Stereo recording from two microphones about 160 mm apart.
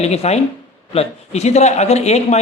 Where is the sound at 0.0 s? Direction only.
40° left (ahead or behind).